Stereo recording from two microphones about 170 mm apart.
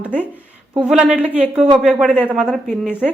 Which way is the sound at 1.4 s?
40° right (ahead or behind).